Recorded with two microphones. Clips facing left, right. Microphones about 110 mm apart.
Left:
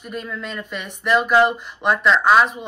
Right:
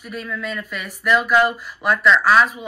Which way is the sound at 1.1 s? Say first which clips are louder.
Left 1 dB; 40° left (ahead or behind).